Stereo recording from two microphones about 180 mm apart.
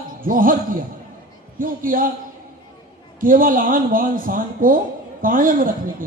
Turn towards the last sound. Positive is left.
turn(degrees=-50)  # may be behind; listen again after turning